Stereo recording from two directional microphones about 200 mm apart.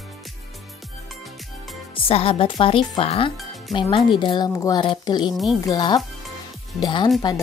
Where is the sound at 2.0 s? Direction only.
30° left (ahead or behind).